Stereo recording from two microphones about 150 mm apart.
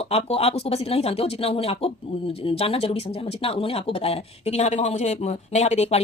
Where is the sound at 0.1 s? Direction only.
40° left (ahead or behind).